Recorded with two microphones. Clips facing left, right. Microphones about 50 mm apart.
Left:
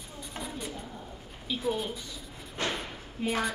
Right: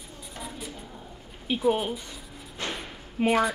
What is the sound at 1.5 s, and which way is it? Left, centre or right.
Speech, right.